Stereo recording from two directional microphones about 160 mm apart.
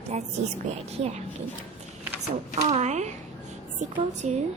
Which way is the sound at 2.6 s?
45° right (ahead or behind).